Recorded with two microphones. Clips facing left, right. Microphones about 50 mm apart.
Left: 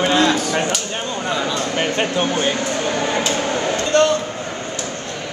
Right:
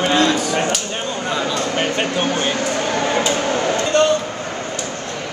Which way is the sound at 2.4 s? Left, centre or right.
Right.